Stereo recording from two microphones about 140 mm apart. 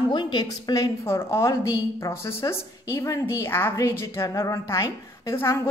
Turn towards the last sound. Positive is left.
turn(degrees=20)  # may be behind; listen again after turning